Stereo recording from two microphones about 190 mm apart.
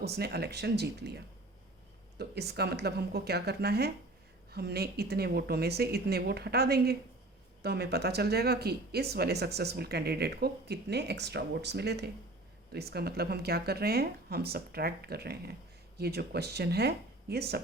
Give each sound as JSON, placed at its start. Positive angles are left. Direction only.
{"t": 0.0, "sound": "speech", "side_deg": -60}